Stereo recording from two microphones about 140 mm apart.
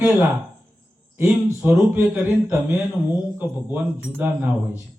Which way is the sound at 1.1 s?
15° right (ahead or behind).